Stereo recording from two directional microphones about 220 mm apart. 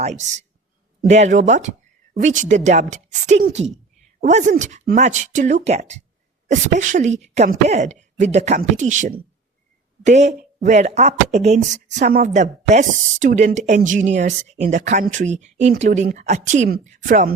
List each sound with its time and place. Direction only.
0.0 s speech: 30° right (ahead or behind)